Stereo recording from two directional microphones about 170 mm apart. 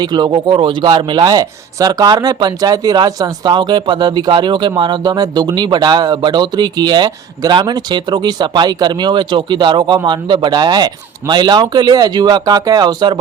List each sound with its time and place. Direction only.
0.0 s speech: 25° right (ahead or behind)